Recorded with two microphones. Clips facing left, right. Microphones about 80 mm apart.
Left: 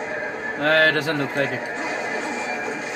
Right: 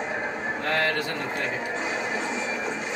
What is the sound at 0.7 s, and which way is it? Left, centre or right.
Speech, left.